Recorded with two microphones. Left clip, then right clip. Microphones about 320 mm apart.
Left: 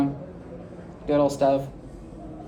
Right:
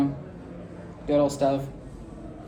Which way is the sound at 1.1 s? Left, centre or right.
Centre.